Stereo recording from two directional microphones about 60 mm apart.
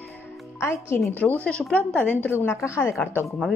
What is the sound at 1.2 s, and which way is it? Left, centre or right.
Speech, left.